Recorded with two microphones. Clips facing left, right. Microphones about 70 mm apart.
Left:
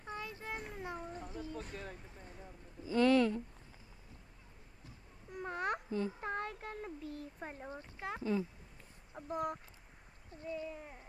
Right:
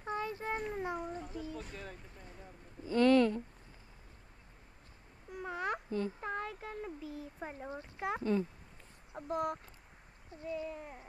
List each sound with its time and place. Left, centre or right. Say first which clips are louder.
0.0 s a sound: right 7 dB; right
1.2 s speech: right 1 dB; left
5.3 s babbling: even; centre
5.9 s a child's voice: right 1 dB; centre
6.2 s speech: right 1 dB; centre
8.2 s speech: right 2 dB; centre
9.3 s speech: right 3 dB; centre
10.7 s speech: right 3 dB; centre